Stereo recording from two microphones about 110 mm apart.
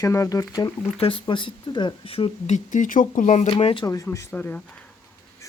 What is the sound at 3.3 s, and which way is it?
Speech, 90° left.